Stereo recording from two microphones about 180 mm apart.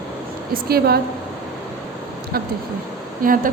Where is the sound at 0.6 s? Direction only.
60° right (ahead or behind).